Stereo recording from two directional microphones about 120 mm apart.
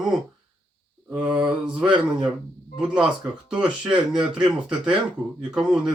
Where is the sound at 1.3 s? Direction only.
10° right (ahead or behind).